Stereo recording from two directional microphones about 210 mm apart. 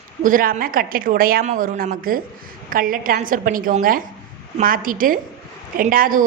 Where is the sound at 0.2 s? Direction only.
40° right (ahead or behind).